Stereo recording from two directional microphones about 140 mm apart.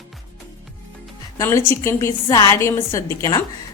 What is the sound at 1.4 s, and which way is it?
A woman's voice, 20° left (ahead or behind).